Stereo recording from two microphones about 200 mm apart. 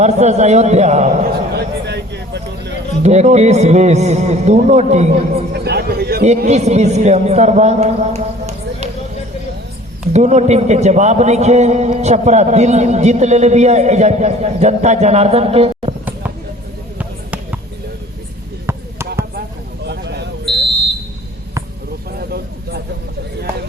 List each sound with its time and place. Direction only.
0.0 s a man's voice: 35° right (ahead or behind)
1.5 s a sound: 55° right (ahead or behind)
3.0 s a man's voice: 35° right (ahead or behind)
5.5 s a sound: 55° right (ahead or behind)
6.5 s a man's voice: 35° right (ahead or behind)
10.1 s a man's voice: 35° right (ahead or behind)
17.0 s basketball bounce: 5° right (ahead or behind)
18.6 s basketball bounce: 15° right (ahead or behind)
19.8 s a sound: 55° right (ahead or behind)
22.2 s vehicle: 50° right (ahead or behind)